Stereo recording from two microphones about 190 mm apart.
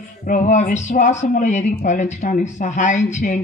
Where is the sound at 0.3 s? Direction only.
40° left (ahead or behind).